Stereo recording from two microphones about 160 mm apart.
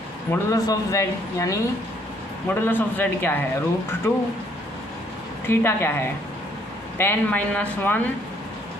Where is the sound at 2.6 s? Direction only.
10° left (ahead or behind).